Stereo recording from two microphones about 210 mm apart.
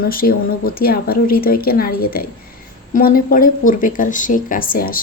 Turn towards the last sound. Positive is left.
turn(degrees=45)  # may be behind; listen again after turning